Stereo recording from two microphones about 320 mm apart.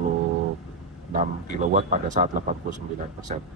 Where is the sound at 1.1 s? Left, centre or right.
Right.